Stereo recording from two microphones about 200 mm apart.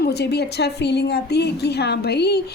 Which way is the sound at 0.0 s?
55° left (ahead or behind).